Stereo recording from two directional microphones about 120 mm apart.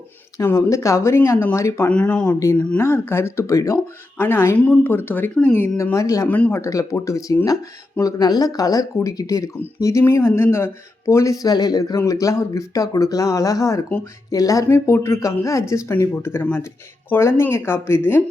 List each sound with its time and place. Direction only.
0.3 s speech: 25° left (ahead or behind)
1.9 s speech: 10° left (ahead or behind)
2.2 s speech: 25° left (ahead or behind)
2.6 s speech: 10° left (ahead or behind)
2.8 s speech: 20° left (ahead or behind)
6.2 s speech: 15° left (ahead or behind)